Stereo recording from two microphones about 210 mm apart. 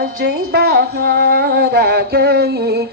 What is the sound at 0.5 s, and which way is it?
Music, 50° right (ahead or behind).